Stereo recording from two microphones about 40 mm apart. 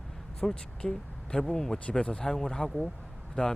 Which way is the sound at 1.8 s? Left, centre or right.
Left.